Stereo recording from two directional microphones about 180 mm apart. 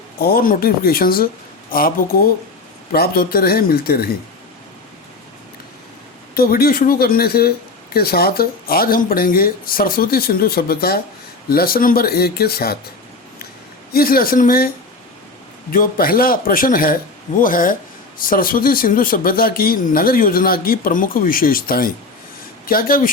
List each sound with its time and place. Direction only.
0.2 s speech: 55° left (ahead or behind)
6.3 s speech: 55° left (ahead or behind)
13.9 s speech: 55° left (ahead or behind)
15.7 s speech: 50° left (ahead or behind)